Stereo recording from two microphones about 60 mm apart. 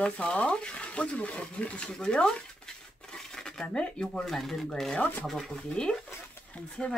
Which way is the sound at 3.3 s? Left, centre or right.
Centre.